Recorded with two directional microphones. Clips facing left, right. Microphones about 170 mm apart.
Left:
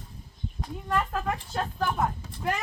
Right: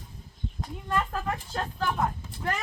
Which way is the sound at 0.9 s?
10° left (ahead or behind).